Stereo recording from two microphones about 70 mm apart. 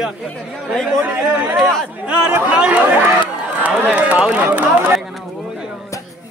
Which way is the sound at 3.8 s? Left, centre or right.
Centre.